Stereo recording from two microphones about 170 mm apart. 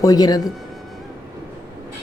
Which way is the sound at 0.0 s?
20° left (ahead or behind).